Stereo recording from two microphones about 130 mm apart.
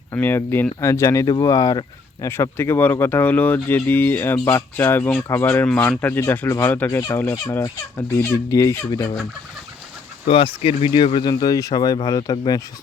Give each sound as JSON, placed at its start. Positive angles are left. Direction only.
{"t": 0.1, "sound": "speech", "side_deg": 20}
{"t": 10.2, "sound": "speech", "side_deg": 45}